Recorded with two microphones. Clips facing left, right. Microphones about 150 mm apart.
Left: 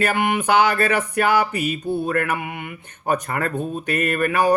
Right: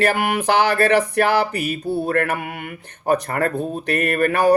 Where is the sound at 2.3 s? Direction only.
50° right (ahead or behind).